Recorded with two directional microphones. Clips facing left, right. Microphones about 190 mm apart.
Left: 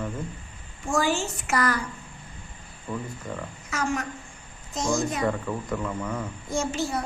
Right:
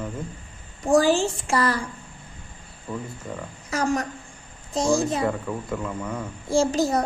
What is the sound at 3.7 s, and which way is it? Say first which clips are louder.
A woman's voice: right 4 dB; 35° right (ahead or behind).